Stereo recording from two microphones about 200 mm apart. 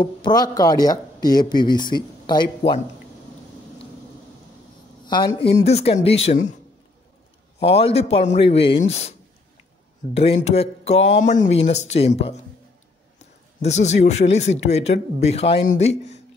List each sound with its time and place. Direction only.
0.0 s speech: 20° left (ahead or behind)
5.0 s speech: 20° left (ahead or behind)
7.6 s speech: 30° left (ahead or behind)
10.1 s speech: 30° left (ahead or behind)